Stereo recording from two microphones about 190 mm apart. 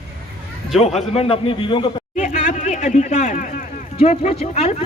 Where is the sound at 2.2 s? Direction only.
40° left (ahead or behind).